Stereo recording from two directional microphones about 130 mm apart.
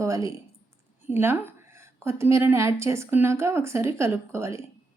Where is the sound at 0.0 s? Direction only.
25° right (ahead or behind).